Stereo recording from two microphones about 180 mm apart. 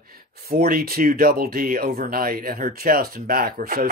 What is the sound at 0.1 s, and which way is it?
Speech, 55° right (ahead or behind).